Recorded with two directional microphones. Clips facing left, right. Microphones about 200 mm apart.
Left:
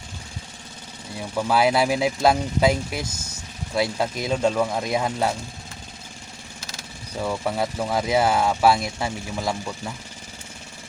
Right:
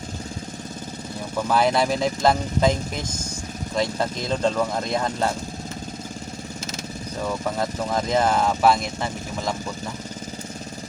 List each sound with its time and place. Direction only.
1.4 s speech: 10° left (ahead or behind)
7.2 s speech: 10° left (ahead or behind)